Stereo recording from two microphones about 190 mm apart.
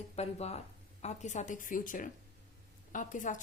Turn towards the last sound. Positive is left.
turn(degrees=45)  # may be behind; listen again after turning